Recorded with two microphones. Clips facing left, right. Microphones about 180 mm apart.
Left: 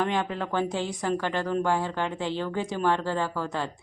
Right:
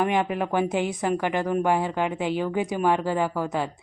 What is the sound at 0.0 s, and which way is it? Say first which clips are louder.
Speech: right 4 dB; 15° right (ahead or behind).